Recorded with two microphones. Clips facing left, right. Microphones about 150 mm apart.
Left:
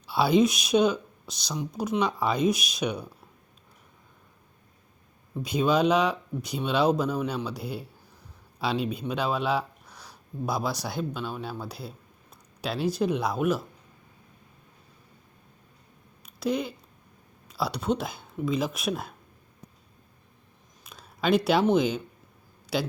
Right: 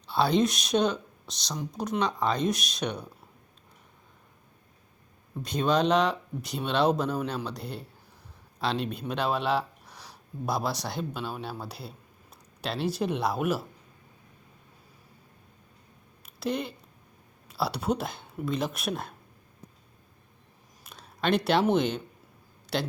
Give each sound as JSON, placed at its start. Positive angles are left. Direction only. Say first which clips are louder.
{"t": 0.1, "sound": "speech", "louder": "left 3 dB", "side_deg": 5}
{"t": 5.4, "sound": "speech", "louder": "left 2 dB", "side_deg": 5}
{"t": 16.2, "sound": "a sound", "louder": "left 3 dB", "side_deg": 0}
{"t": 17.5, "sound": "speech", "louder": "left 1 dB", "side_deg": -5}
{"t": 20.8, "sound": "speech", "louder": "left 2 dB", "side_deg": 0}